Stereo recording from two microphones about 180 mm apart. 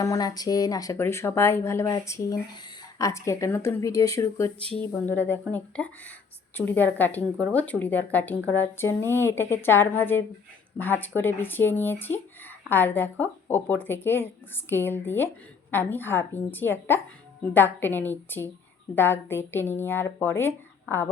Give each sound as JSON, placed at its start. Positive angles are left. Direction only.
{"t": 0.0, "sound": "speech", "side_deg": 20}